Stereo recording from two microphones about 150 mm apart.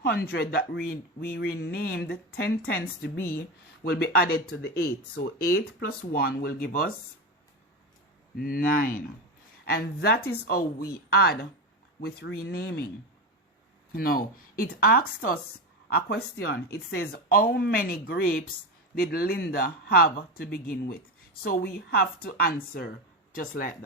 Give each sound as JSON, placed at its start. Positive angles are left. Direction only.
{"t": 0.0, "sound": "speech", "side_deg": 90}
{"t": 3.2, "sound": "speech", "side_deg": 15}
{"t": 3.8, "sound": "speech", "side_deg": 90}
{"t": 8.4, "sound": "speech", "side_deg": 75}
{"t": 9.6, "sound": "speech", "side_deg": 90}
{"t": 13.9, "sound": "speech", "side_deg": 75}
{"t": 15.9, "sound": "a woman's voice", "side_deg": 90}
{"t": 21.4, "sound": "a woman's voice", "side_deg": 90}